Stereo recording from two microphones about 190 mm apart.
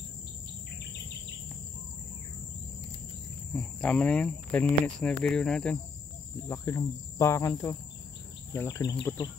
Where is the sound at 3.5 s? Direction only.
5° left (ahead or behind).